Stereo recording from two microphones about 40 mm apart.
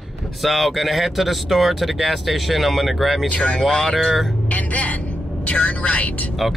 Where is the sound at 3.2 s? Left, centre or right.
Left.